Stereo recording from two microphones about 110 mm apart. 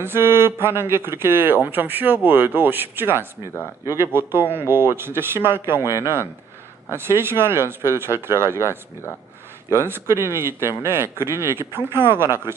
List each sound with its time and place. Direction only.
0.0 s speech: 20° right (ahead or behind)